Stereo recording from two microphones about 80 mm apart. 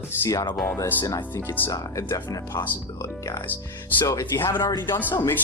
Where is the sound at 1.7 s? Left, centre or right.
Left.